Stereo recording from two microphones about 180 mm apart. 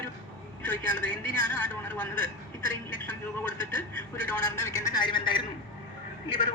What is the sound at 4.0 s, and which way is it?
A man's voice, 15° left (ahead or behind).